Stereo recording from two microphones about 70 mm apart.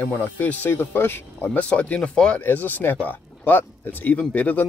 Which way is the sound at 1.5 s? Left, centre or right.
Centre.